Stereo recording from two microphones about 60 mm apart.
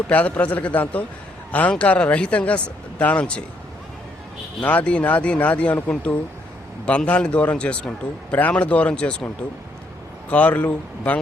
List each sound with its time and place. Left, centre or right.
0.1 s a man's voice: left
4.6 s a man's voice: left
10.2 s a man's voice: left